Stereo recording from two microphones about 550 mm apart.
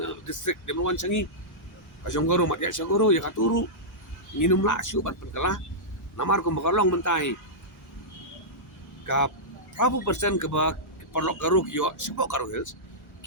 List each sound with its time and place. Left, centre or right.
0.0 s speech: left
9.0 s speech: left